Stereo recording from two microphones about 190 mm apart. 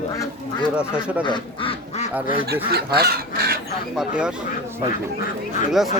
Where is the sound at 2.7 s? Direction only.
55° right (ahead or behind).